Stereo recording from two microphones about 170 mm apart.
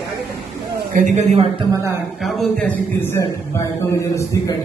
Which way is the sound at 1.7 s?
15° right (ahead or behind).